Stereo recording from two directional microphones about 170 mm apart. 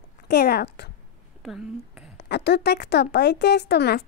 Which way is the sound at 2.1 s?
75° left (ahead or behind).